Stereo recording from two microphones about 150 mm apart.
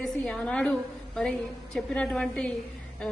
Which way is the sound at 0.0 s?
5° left (ahead or behind).